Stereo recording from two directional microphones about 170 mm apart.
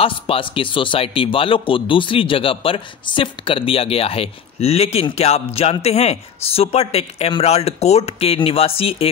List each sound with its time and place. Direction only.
0.0 s a man's voice: 30° left (ahead or behind)